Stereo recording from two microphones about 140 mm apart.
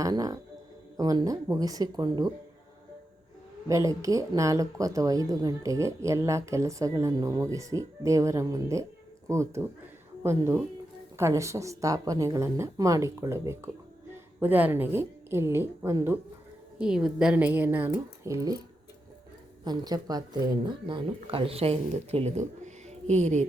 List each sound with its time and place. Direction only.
0.0 s speech: 25° right (ahead or behind)
3.7 s speech: 25° right (ahead or behind)
16.7 s speech: 5° right (ahead or behind); by 18.6 s 25° right (ahead or behind)
19.6 s speech: 30° right (ahead or behind); by 23.5 s 50° right (ahead or behind)